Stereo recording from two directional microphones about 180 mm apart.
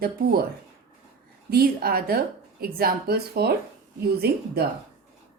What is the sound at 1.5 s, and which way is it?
Speech, 60° right (ahead or behind).